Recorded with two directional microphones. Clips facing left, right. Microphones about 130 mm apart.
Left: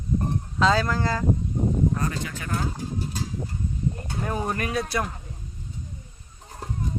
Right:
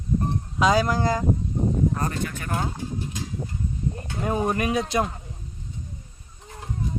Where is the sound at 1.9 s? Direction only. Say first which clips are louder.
Right 1 dB; 40° right (ahead or behind).